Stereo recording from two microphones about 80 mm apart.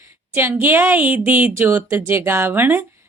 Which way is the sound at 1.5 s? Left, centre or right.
Right.